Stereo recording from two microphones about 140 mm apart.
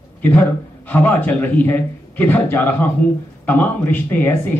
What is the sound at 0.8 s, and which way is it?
A man's voice, 10° left (ahead or behind).